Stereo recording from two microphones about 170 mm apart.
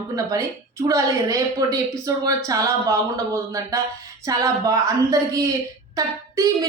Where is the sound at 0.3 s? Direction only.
15° right (ahead or behind).